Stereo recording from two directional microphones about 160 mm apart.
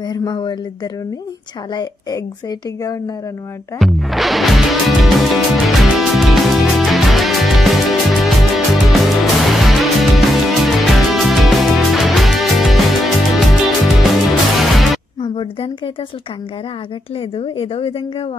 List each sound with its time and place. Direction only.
0.0 s speech: 25° left (ahead or behind)
1.7 s speech: 25° left (ahead or behind)
3.8 s music: centre (ahead or behind)
15.2 s speech: 30° left (ahead or behind)
17.4 s speech: 35° left (ahead or behind)